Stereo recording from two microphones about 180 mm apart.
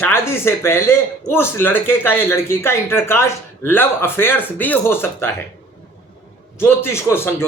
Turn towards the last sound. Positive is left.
turn(degrees=15)  # may be behind; listen again after turning